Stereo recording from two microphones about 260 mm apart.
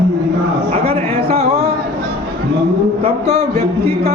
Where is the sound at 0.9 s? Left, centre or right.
Right.